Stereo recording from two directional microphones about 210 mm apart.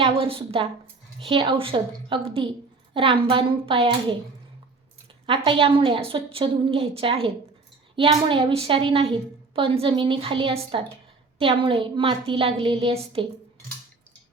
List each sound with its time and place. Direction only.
0.0 s a woman's voice: 25° right (ahead or behind)
5.2 s a woman's voice: 25° right (ahead or behind)